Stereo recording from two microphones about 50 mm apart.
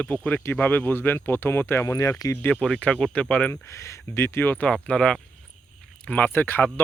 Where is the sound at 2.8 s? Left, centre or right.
Left.